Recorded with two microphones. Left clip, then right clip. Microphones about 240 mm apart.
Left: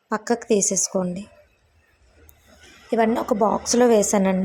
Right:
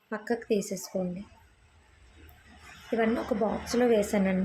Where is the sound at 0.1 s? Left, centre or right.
Centre.